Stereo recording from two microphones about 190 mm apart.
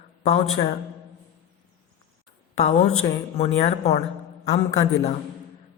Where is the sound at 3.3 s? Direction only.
35° left (ahead or behind).